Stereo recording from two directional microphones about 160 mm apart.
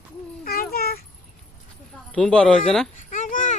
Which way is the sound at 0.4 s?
70° left (ahead or behind).